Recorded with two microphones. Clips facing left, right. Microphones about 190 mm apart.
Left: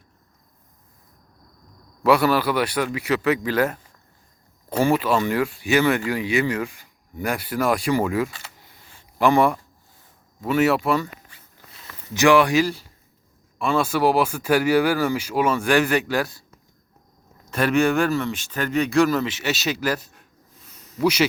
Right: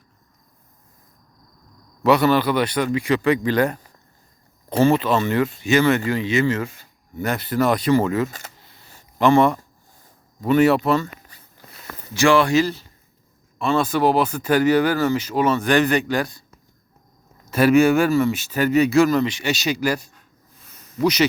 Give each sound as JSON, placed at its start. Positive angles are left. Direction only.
{"t": 2.0, "sound": "speech", "side_deg": 5}
{"t": 4.8, "sound": "speech", "side_deg": 10}
{"t": 8.5, "sound": "a sound", "side_deg": 15}
{"t": 9.1, "sound": "speech", "side_deg": 10}
{"t": 11.3, "sound": "a sound", "side_deg": -40}
{"t": 12.1, "sound": "speech", "side_deg": 15}
{"t": 17.5, "sound": "speech", "side_deg": -5}